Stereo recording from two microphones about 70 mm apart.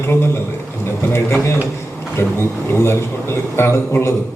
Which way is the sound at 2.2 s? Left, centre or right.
Left.